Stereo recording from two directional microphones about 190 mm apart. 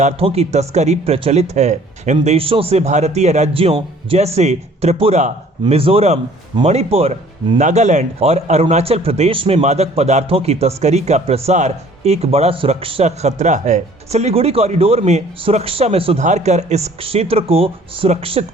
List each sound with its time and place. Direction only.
0.0 s a man's voice: 30° right (ahead or behind)